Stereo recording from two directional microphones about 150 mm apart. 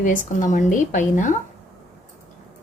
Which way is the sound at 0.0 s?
60° left (ahead or behind).